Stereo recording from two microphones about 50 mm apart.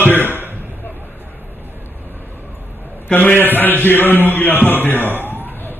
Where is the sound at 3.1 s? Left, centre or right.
Left.